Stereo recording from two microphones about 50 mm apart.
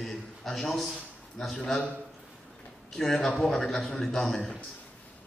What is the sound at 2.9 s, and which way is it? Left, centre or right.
A man's voice, centre.